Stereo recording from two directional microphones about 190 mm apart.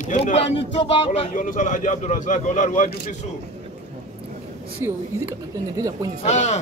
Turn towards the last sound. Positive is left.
turn(degrees=40)  # may be behind; listen again after turning